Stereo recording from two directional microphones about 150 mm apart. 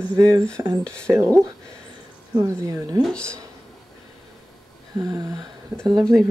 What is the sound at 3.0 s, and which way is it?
Speech, 5° left (ahead or behind).